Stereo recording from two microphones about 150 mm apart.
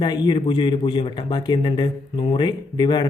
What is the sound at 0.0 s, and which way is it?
Speech, 30° left (ahead or behind).